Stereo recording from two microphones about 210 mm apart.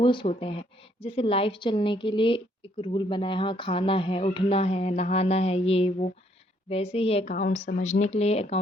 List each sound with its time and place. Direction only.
0.0 s a woman's voice: 25° left (ahead or behind)